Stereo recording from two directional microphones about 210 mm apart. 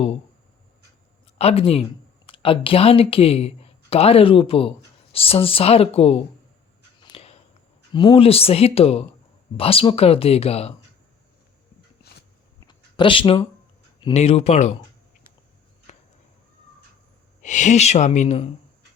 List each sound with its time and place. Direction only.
1.4 s speech: 30° left (ahead or behind)
7.0 s a sound: 30° left (ahead or behind)
7.9 s speech: 25° left (ahead or behind)
12.5 s a sound: 20° left (ahead or behind)
14.0 s speech: 30° left (ahead or behind)
15.9 s chop: 30° left (ahead or behind)
17.4 s speech: 35° left (ahead or behind)